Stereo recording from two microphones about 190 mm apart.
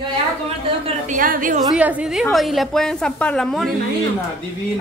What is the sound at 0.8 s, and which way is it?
Speech, 40° right (ahead or behind).